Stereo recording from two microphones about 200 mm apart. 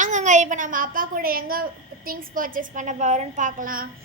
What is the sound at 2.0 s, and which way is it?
A woman's voice, 45° right (ahead or behind).